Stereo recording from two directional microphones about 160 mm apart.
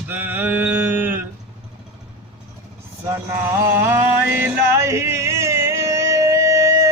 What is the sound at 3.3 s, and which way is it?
Music, 15° right (ahead or behind).